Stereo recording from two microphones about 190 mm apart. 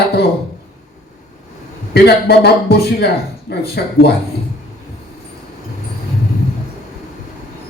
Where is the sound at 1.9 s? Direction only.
55° left (ahead or behind).